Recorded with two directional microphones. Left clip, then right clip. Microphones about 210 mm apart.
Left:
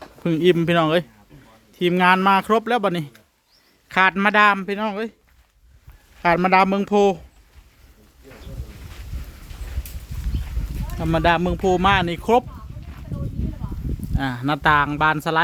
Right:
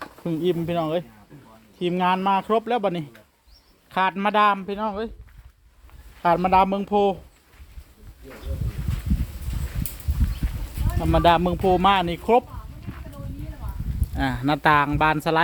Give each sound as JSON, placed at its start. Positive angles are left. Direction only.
{"t": 0.3, "sound": "speech", "side_deg": 40}
{"t": 6.2, "sound": "speech", "side_deg": 25}
{"t": 11.0, "sound": "speech", "side_deg": 15}
{"t": 12.9, "sound": "a sound", "side_deg": 0}
{"t": 14.2, "sound": "speech", "side_deg": 5}